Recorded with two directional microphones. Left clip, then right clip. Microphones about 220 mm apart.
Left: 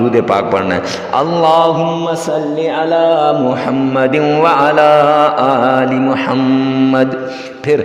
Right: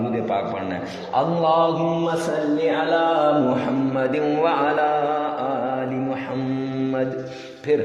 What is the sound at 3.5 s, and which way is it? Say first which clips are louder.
Mantra: left 8 dB; 45° left (ahead or behind).